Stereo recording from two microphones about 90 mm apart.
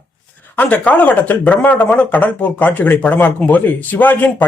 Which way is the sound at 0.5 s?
20° left (ahead or behind).